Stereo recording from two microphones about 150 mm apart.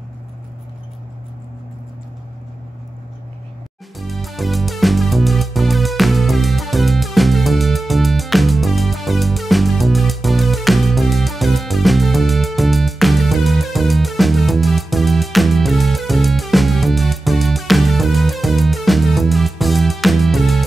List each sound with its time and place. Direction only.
4.0 s music: centre (ahead or behind)